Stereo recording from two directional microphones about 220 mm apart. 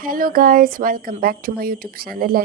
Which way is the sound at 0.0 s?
40° right (ahead or behind).